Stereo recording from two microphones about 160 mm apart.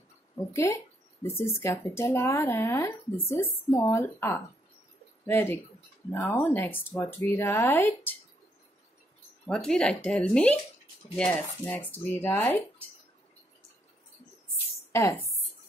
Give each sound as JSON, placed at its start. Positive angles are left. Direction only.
{"t": 0.5, "sound": "speech", "side_deg": 20}
{"t": 9.5, "sound": "speech", "side_deg": 5}
{"t": 14.9, "sound": "a woman's voice", "side_deg": 15}